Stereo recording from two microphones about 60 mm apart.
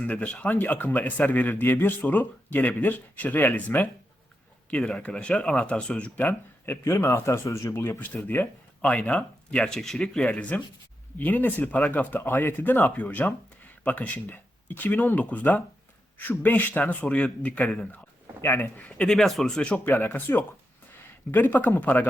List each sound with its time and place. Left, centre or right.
0.0 s a man's voice: left
4.7 s speech: centre
6.8 s speech: left
7.9 s a man's voice: left
8.8 s speech: centre
10.2 s a man's voice: left
18.4 s a man's voice: left
18.8 s speech: left
19.0 s speech: centre
19.8 s a man's voice: left